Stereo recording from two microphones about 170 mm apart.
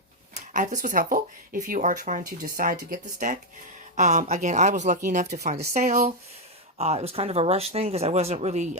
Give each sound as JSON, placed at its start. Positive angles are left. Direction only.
{"t": 0.3, "sound": "speech", "side_deg": -45}